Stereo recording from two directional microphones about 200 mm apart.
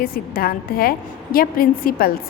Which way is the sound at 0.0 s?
45° left (ahead or behind).